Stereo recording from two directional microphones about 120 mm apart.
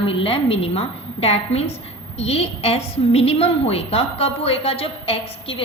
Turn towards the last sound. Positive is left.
turn(degrees=50)  # may be behind; listen again after turning